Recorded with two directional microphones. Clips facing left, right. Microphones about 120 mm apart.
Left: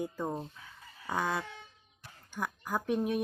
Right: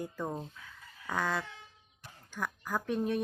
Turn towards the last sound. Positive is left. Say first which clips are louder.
# left 1 dB
turn(degrees=10)  # may be behind; listen again after turning